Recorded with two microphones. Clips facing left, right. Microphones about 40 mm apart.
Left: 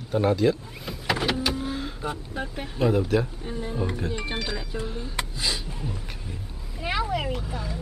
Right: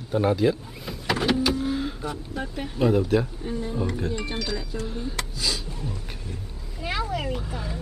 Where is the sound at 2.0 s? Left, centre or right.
Left.